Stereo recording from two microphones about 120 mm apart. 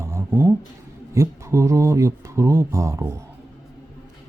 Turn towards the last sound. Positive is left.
turn(degrees=-25)  # may be behind; listen again after turning